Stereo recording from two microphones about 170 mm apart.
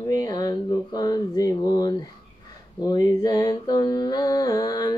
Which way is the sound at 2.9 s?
20° left (ahead or behind).